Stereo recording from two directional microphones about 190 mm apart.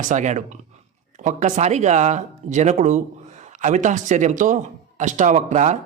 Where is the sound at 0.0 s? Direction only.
40° right (ahead or behind).